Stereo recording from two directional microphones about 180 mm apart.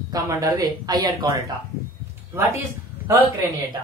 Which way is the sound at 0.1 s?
20° right (ahead or behind).